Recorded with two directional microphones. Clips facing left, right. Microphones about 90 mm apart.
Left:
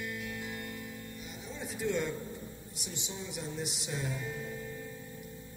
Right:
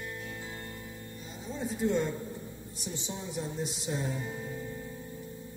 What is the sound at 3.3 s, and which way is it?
Speech, 30° right (ahead or behind).